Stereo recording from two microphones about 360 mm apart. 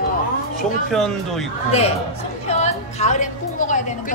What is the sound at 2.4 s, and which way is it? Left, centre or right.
A woman's voice, centre.